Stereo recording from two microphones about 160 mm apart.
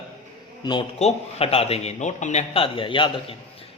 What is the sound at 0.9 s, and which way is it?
A man's voice, 40° left (ahead or behind).